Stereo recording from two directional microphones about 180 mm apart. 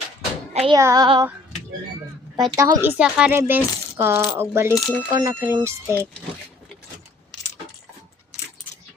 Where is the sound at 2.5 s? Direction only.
20° right (ahead or behind).